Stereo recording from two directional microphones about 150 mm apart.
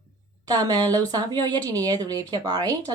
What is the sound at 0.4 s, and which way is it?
Speech, 25° right (ahead or behind).